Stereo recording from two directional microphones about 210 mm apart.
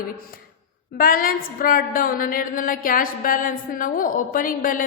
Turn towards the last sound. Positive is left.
turn(degrees=40)  # may be behind; listen again after turning